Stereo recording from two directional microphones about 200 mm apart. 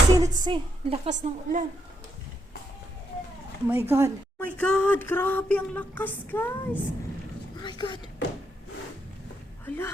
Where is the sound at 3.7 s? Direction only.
10° right (ahead or behind).